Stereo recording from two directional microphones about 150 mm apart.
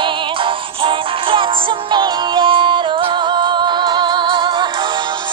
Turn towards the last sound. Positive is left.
turn(degrees=-35)  # may be behind; listen again after turning